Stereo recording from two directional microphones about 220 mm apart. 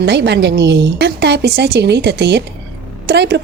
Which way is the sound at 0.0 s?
50° right (ahead or behind).